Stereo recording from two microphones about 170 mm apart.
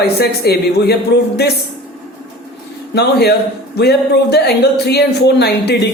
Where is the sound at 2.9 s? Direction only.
75° left (ahead or behind).